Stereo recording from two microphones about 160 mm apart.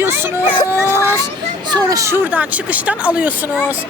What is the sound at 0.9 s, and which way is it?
Speech, 15° left (ahead or behind).